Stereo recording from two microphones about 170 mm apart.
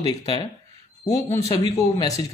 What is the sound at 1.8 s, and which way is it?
Speech, 20° left (ahead or behind).